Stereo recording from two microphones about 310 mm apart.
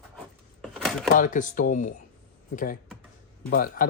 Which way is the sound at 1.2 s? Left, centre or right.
Left.